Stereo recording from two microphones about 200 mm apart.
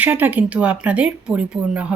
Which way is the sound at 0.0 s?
10° right (ahead or behind).